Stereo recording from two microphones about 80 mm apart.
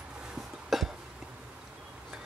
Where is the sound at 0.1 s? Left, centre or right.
Centre.